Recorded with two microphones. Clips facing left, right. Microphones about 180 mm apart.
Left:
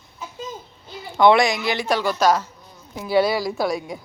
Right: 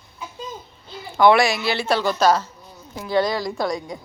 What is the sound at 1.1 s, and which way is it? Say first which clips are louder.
A woman's voice: even; 20° left (ahead or behind).